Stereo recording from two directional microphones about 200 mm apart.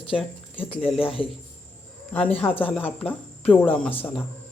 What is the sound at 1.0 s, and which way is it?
Speech, 25° left (ahead or behind).